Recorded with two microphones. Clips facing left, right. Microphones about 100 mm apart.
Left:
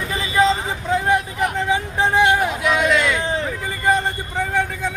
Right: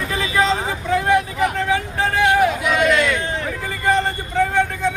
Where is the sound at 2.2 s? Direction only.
Centre (ahead or behind).